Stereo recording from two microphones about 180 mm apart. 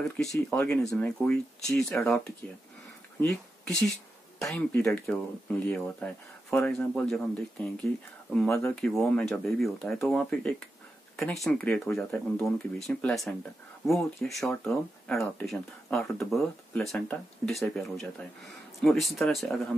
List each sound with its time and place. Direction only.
0.5 s speech: 5° left (ahead or behind)
1.8 s speech: 15° left (ahead or behind)
3.2 s speech: centre (ahead or behind)